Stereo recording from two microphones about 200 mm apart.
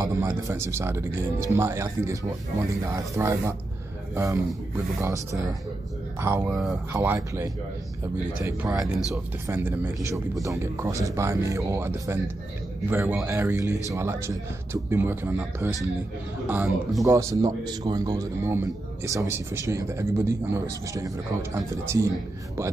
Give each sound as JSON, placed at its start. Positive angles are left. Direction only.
{"t": 0.0, "sound": "a man's voice", "side_deg": -15}
{"t": 6.5, "sound": "speech", "side_deg": 0}
{"t": 6.9, "sound": "speech", "side_deg": -10}
{"t": 8.6, "sound": "speech", "side_deg": 0}